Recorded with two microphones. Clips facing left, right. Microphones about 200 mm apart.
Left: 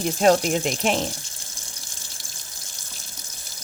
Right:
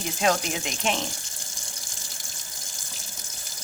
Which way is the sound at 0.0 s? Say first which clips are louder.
Left 7 dB; 45° left (ahead or behind).